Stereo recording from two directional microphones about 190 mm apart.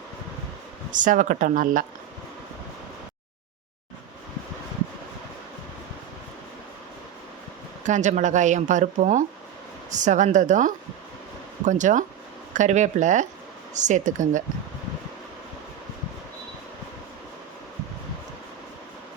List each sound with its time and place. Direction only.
0.9 s speech: 45° right (ahead or behind)
7.9 s speech: 40° right (ahead or behind)